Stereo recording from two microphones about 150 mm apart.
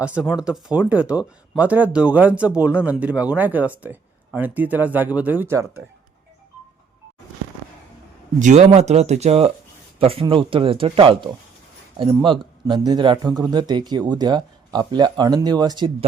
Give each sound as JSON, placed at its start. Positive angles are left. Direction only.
{"t": 0.0, "sound": "speech", "side_deg": -5}
{"t": 8.4, "sound": "speech", "side_deg": -50}